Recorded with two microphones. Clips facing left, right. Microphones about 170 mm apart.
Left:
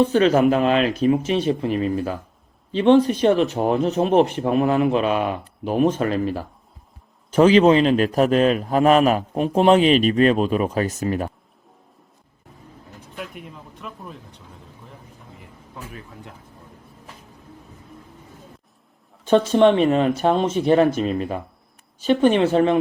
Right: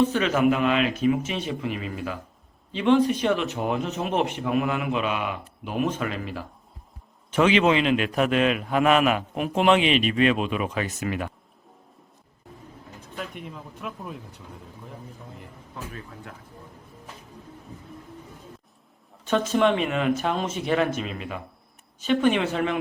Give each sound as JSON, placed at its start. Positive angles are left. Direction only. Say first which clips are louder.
{"t": 0.0, "sound": "a man's voice", "louder": "left 5 dB", "side_deg": 35}
{"t": 13.0, "sound": "speech", "louder": "left 1 dB", "side_deg": 5}
{"t": 19.2, "sound": "a man's voice", "louder": "left 7 dB", "side_deg": 30}